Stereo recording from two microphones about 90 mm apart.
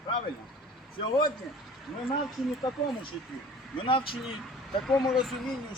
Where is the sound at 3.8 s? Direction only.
70° left (ahead or behind).